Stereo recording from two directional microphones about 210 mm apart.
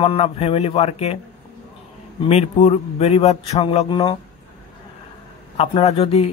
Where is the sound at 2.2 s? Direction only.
30° left (ahead or behind).